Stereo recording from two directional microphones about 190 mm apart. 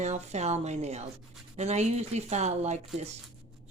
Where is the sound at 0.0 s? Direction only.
35° right (ahead or behind).